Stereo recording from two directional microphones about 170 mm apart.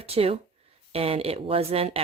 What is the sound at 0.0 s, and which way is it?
Speech, 35° right (ahead or behind).